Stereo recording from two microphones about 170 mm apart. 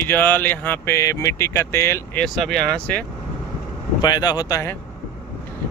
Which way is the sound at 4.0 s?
25° left (ahead or behind).